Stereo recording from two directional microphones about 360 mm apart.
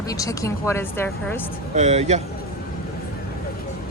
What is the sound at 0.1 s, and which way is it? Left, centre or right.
Speech, centre.